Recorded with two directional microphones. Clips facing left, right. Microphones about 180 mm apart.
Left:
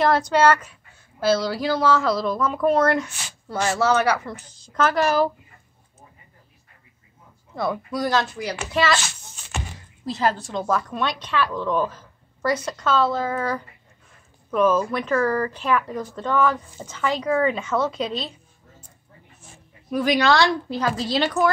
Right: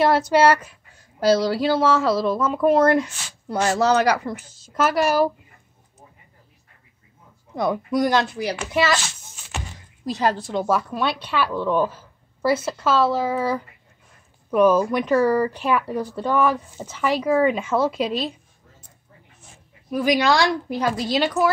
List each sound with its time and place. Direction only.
0.1 s speech: 10° right (ahead or behind)
1.4 s speech: 25° right (ahead or behind)
2.4 s speech: 5° right (ahead or behind)
3.6 s speech: 35° right (ahead or behind)
4.2 s speech: 10° right (ahead or behind)
7.5 s speech: 15° right (ahead or behind)
10.0 s speech: 15° right (ahead or behind)
19.9 s speech: 10° right (ahead or behind)